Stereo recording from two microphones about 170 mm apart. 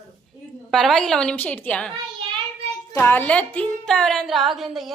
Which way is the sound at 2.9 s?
10° left (ahead or behind).